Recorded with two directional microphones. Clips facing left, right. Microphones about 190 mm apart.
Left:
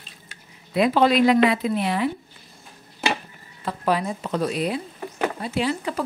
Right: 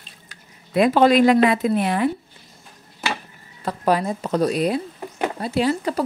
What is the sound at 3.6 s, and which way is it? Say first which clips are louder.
Speech: right 3 dB; 40° right (ahead or behind).